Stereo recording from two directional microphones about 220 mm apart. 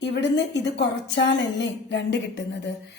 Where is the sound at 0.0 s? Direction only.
50° left (ahead or behind).